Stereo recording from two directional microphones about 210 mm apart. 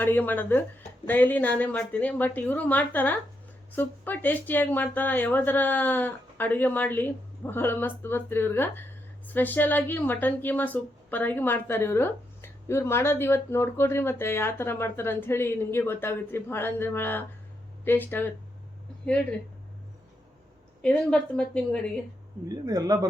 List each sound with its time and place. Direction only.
0.0 s a woman's voice: 10° left (ahead or behind)
20.8 s a woman's voice: 5° left (ahead or behind)
22.6 s speech: 20° right (ahead or behind)